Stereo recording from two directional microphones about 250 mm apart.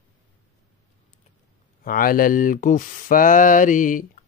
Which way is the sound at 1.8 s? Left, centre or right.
Left.